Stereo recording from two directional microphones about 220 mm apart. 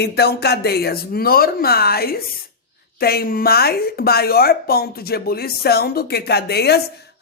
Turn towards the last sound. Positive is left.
turn(degrees=50)  # may be behind; listen again after turning